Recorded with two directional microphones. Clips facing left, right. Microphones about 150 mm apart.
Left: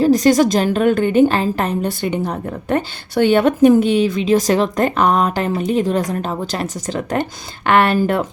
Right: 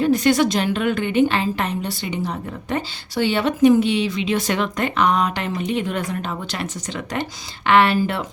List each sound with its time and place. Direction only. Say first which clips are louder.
0.0 s a woman's voice: left 4 dB; 40° left (ahead or behind)